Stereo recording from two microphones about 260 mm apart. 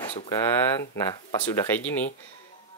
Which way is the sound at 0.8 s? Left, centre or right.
Centre.